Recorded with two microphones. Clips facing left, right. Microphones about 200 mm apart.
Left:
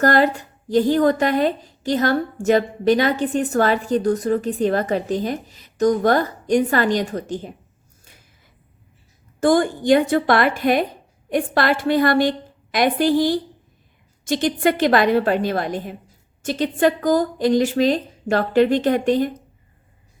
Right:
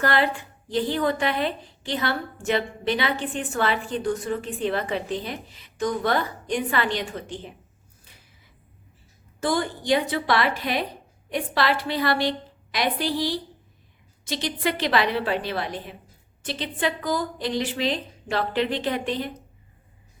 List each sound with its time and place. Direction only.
0.0 s a woman's voice: 40° left (ahead or behind)
9.4 s a woman's voice: 50° left (ahead or behind)